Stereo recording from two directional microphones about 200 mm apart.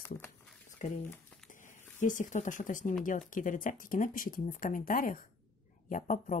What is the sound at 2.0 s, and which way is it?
Speech, 40° left (ahead or behind).